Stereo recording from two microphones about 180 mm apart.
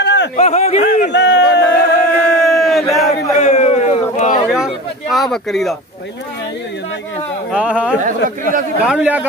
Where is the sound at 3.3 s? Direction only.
40° left (ahead or behind).